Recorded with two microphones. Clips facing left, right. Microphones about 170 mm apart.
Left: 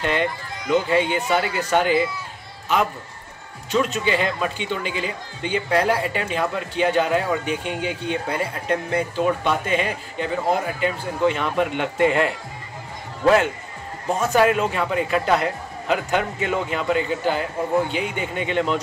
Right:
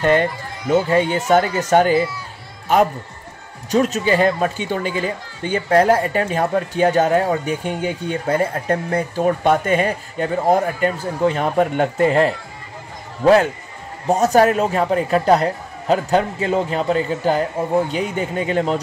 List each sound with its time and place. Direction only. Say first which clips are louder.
0.0 s speech: right 6 dB; 45° right (ahead or behind)
3.7 s speech: right 4 dB; 40° right (ahead or behind)
14.0 s a man's voice: right 4 dB; 40° right (ahead or behind)